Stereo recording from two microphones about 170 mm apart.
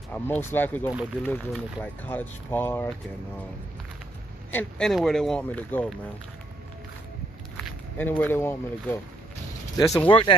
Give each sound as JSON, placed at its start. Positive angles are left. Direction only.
{"t": 0.1, "sound": "speech", "side_deg": 10}
{"t": 4.5, "sound": "speech", "side_deg": 10}
{"t": 7.5, "sound": "speech", "side_deg": 10}
{"t": 10.0, "sound": "speech", "side_deg": 30}